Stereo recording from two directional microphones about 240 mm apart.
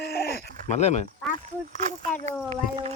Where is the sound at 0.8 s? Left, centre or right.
Left.